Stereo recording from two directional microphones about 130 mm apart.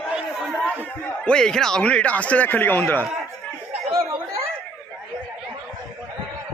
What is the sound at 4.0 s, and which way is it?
Chatter, 20° right (ahead or behind).